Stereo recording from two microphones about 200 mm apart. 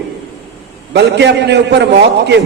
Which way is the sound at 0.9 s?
60° right (ahead or behind).